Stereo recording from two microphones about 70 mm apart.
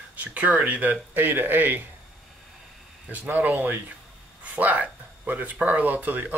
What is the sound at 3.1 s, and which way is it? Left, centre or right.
Speech, right.